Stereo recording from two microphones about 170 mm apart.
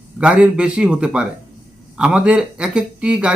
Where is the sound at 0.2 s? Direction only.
5° right (ahead or behind).